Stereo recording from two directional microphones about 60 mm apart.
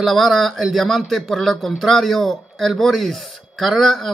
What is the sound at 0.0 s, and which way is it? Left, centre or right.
Speech, centre.